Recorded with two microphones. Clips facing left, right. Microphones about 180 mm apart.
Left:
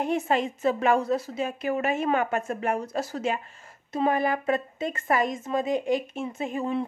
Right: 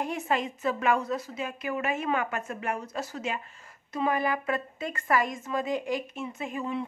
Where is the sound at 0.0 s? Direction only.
25° left (ahead or behind).